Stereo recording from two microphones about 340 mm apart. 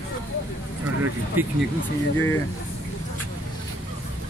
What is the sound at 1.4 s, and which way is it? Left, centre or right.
Speech, centre.